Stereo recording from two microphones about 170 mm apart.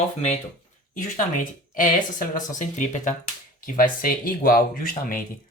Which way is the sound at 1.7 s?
55° left (ahead or behind).